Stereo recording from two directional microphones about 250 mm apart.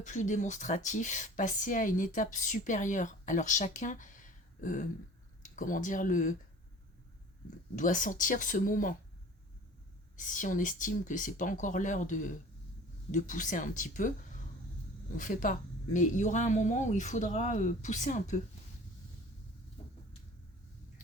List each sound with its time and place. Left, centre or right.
0.0 s speech: left
7.8 s speech: left
10.2 s speech: left
15.2 s speech: left